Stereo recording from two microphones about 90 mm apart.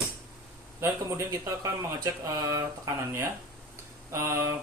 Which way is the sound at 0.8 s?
30° right (ahead or behind).